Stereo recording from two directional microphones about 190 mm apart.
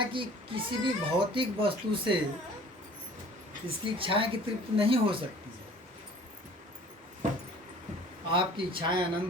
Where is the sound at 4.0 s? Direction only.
30° right (ahead or behind).